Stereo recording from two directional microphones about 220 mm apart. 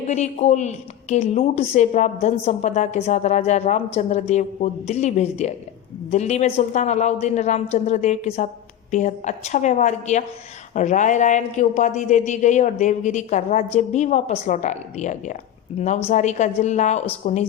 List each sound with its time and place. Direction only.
0.1 s a woman's voice: 30° left (ahead or behind)